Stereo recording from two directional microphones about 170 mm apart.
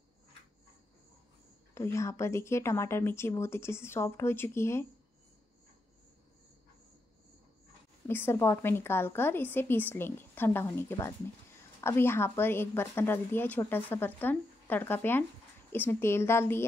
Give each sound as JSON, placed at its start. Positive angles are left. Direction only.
{"t": 1.7, "sound": "a woman's voice", "side_deg": 15}
{"t": 8.1, "sound": "a woman's voice", "side_deg": 15}